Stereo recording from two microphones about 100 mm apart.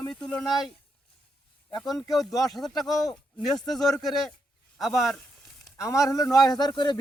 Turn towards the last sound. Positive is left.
turn(degrees=50)  # may be behind; listen again after turning